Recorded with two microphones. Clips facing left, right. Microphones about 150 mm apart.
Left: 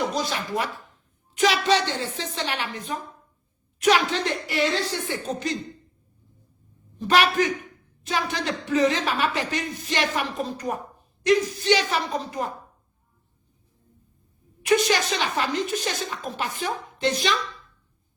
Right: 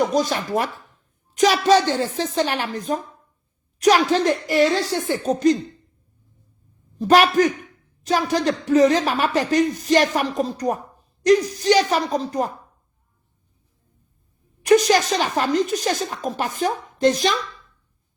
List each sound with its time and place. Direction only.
0.1 s a woman's voice: 45° right (ahead or behind)
7.0 s a woman's voice: 40° right (ahead or behind)
14.6 s speech: 40° right (ahead or behind)